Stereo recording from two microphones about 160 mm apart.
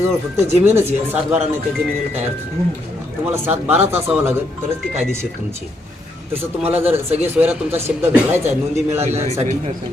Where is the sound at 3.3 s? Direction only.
15° right (ahead or behind).